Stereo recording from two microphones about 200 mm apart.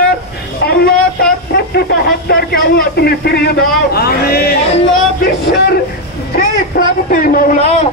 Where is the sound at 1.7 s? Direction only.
50° left (ahead or behind).